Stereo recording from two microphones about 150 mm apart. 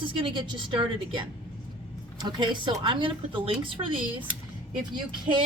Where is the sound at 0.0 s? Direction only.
30° right (ahead or behind).